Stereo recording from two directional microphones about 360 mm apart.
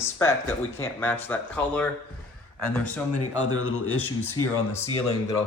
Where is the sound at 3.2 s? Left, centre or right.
Left.